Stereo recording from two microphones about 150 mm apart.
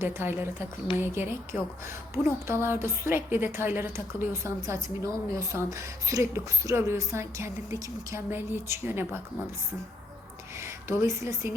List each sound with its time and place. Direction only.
0.0 s a woman's voice: 15° right (ahead or behind)
10.6 s a woman's voice: 15° right (ahead or behind)